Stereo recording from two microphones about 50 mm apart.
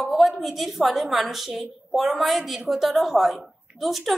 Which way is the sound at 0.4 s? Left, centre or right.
Centre.